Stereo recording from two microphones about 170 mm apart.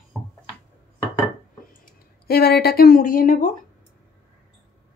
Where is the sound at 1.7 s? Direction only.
60° left (ahead or behind).